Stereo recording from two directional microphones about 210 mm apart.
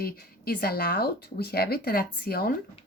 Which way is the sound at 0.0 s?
45° left (ahead or behind).